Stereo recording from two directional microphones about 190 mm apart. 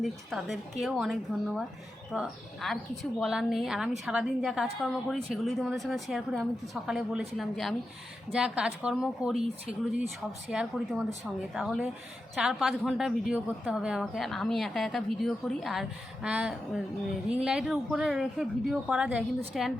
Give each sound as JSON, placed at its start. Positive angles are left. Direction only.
{"t": 0.0, "sound": "speech", "side_deg": 0}